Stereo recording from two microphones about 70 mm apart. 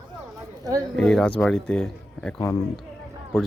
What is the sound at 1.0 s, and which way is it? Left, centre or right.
Speech, centre.